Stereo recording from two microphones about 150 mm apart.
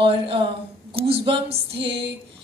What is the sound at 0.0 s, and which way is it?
A woman's voice, 35° right (ahead or behind).